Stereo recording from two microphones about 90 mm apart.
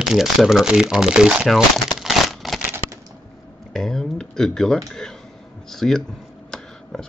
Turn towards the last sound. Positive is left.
turn(degrees=5)  # may be behind; listen again after turning